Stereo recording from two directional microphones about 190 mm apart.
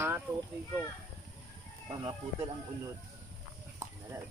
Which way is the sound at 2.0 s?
25° right (ahead or behind).